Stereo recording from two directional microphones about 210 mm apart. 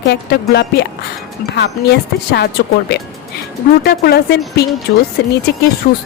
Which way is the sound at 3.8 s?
50° left (ahead or behind).